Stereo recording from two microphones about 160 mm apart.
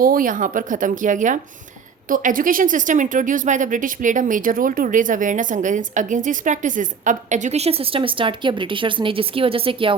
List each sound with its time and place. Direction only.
0.0 s speech: 60° right (ahead or behind); by 9.9 s 35° right (ahead or behind)